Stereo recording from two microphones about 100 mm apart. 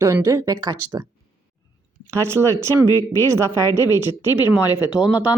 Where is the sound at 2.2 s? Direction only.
30° right (ahead or behind).